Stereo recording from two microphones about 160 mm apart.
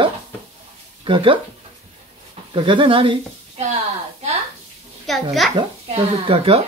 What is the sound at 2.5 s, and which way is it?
Speech, 30° right (ahead or behind).